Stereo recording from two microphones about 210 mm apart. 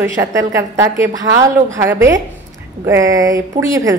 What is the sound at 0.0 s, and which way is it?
A woman's voice, 15° right (ahead or behind).